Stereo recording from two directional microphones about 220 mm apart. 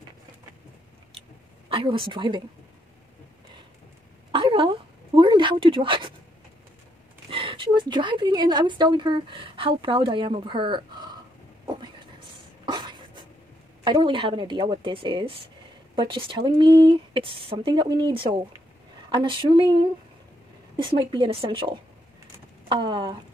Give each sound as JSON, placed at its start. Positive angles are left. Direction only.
{"t": 1.7, "sound": "speech", "side_deg": -25}
{"t": 4.3, "sound": "a sound", "side_deg": -25}
{"t": 7.2, "sound": "a woman's voice", "side_deg": -25}
{"t": 11.6, "sound": "vehicle", "side_deg": -20}
{"t": 12.6, "sound": "a sound", "side_deg": -20}
{"t": 13.8, "sound": "speech", "side_deg": -20}